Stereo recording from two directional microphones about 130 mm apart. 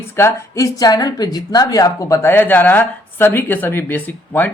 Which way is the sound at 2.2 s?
15° left (ahead or behind).